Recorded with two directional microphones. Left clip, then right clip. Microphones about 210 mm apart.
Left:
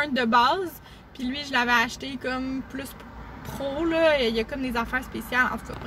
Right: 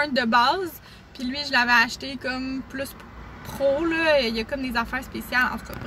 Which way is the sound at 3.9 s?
5° right (ahead or behind).